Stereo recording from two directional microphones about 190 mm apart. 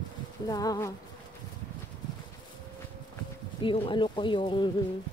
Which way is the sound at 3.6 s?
25° left (ahead or behind).